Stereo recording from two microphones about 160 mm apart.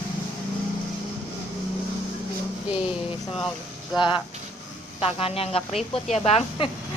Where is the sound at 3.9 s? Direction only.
30° left (ahead or behind).